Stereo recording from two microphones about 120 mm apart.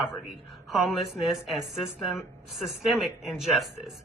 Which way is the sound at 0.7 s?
Centre (ahead or behind).